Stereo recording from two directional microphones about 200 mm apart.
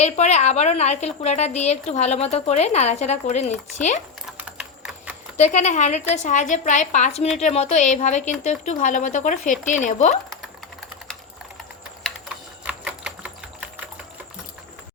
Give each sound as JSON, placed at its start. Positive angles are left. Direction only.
{"t": 0.0, "sound": "a woman's voice", "side_deg": 35}
{"t": 4.3, "sound": "typing", "side_deg": -5}
{"t": 5.4, "sound": "a woman's voice", "side_deg": 35}
{"t": 12.6, "sound": "typing", "side_deg": -5}